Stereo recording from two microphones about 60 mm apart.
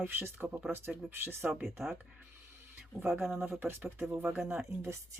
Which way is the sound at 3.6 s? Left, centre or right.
Right.